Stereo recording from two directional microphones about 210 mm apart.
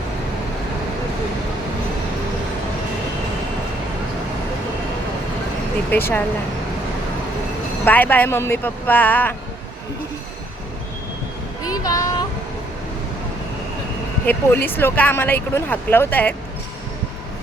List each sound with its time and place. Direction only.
5.9 s speech: 10° left (ahead or behind)
7.9 s speech: 10° left (ahead or behind)
11.6 s child singing: 15° left (ahead or behind)
14.3 s speech: 10° left (ahead or behind)